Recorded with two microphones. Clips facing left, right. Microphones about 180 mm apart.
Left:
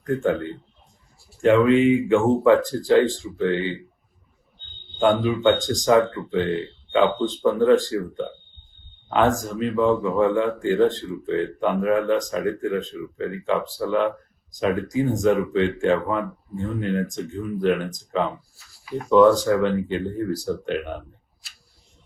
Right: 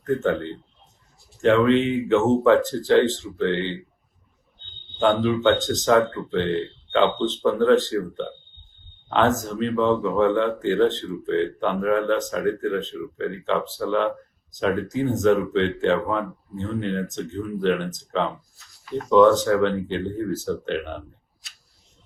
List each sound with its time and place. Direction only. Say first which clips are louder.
0.2 s speech: left 1 dB; 5° left (ahead or behind)
4.9 s speech: even; 5° left (ahead or behind)
15.1 s speech: right 2 dB; 10° left (ahead or behind)